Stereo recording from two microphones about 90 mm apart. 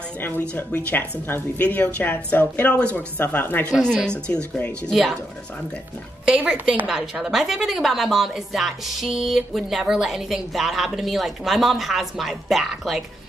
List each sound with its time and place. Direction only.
1.2 s a woman's voice: 20° left (ahead or behind)
3.8 s speech: 10° left (ahead or behind)
6.2 s a woman's voice: 10° right (ahead or behind)